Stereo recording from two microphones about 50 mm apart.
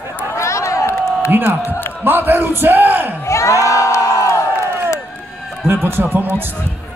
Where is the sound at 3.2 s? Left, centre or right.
Left.